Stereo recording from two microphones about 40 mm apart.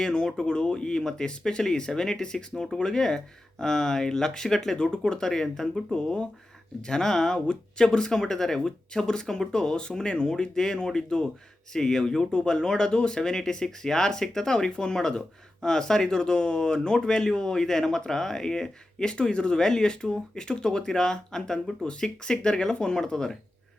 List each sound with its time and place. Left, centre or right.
0.0 s speech: centre
4.8 s speech: left